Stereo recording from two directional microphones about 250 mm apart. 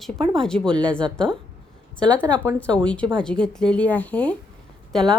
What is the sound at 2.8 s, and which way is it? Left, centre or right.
A woman's voice, centre.